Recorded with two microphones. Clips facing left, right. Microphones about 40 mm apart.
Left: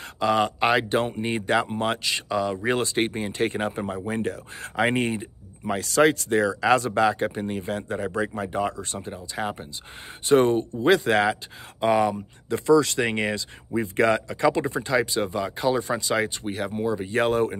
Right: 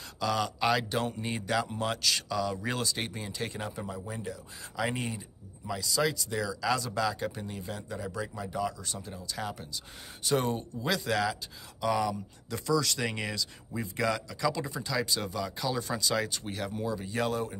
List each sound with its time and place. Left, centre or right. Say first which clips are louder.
0.2 s speech: left 8 dB; left